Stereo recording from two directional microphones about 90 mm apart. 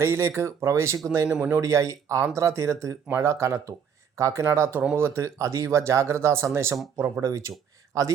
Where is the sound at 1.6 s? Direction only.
35° right (ahead or behind).